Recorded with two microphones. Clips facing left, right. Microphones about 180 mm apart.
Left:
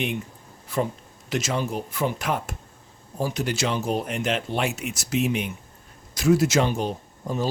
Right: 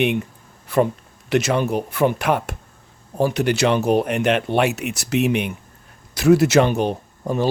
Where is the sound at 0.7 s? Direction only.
65° right (ahead or behind).